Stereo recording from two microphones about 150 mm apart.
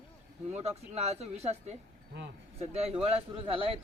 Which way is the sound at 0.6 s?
45° right (ahead or behind).